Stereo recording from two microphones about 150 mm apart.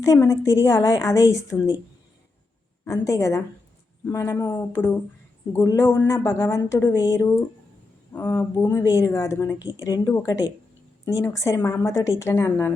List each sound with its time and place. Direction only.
0.0 s speech: 20° left (ahead or behind)
2.8 s speech: 20° left (ahead or behind)